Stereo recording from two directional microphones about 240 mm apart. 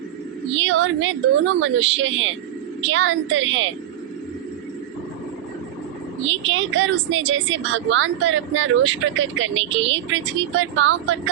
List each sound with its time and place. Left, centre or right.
0.6 s a woman's voice: right
6.2 s a woman's voice: right